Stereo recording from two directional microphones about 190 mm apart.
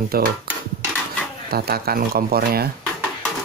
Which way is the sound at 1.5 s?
55° right (ahead or behind).